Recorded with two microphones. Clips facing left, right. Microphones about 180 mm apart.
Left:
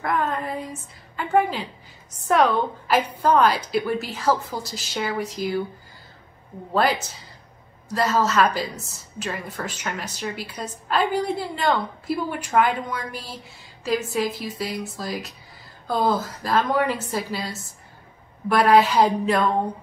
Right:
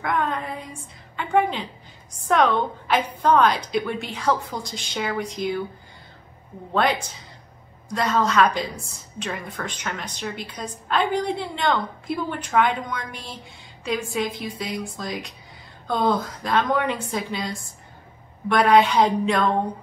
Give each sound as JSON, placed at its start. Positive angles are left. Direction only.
{"t": 0.0, "sound": "a sound", "side_deg": 5}
{"t": 1.1, "sound": "a woman's voice", "side_deg": 5}
{"t": 6.7, "sound": "a woman's voice", "side_deg": 5}